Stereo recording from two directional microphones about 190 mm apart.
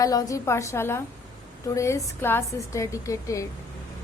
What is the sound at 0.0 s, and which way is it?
A woman's voice, 20° left (ahead or behind).